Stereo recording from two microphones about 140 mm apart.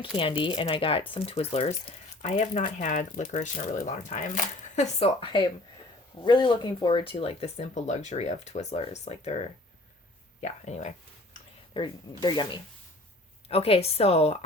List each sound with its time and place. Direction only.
0.2 s speech: 35° left (ahead or behind)
2.2 s speech: 60° left (ahead or behind)
6.2 s speech: 35° left (ahead or behind); by 10.9 s 55° left (ahead or behind)
11.7 s speech: 30° left (ahead or behind)
13.5 s speech: 45° left (ahead or behind)